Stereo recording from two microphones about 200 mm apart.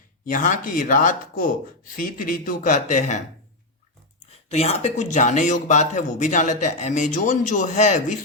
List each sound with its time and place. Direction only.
0.3 s speech: 40° left (ahead or behind)
4.4 s speech: 30° left (ahead or behind)